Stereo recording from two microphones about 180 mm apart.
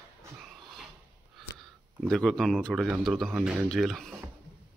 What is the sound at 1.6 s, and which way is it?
Speech, 5° left (ahead or behind).